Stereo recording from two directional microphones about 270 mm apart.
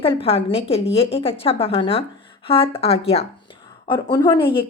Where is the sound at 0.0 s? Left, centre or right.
Left.